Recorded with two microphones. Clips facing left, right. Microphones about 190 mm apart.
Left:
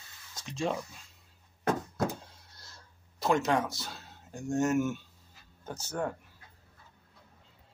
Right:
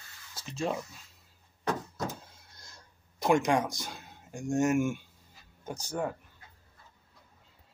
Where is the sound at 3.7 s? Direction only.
15° right (ahead or behind).